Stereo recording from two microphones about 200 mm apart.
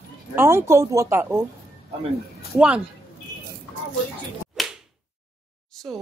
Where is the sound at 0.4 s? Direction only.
10° right (ahead or behind).